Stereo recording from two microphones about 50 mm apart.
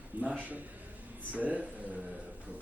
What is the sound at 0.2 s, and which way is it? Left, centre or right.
Speech, right.